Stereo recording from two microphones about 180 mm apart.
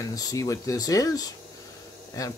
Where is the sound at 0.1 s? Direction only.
20° left (ahead or behind).